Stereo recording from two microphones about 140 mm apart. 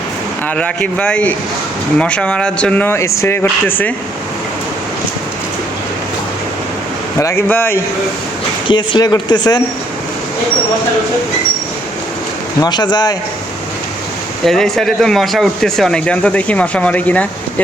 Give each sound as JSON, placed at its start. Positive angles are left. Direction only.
{"t": 0.4, "sound": "speech", "side_deg": 10}
{"t": 7.2, "sound": "speech", "side_deg": 20}
{"t": 8.6, "sound": "speech", "side_deg": 35}
{"t": 12.5, "sound": "speech", "side_deg": 30}
{"t": 14.4, "sound": "speech", "side_deg": 5}